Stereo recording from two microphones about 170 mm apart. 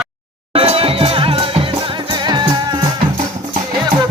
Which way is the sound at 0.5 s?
35° right (ahead or behind).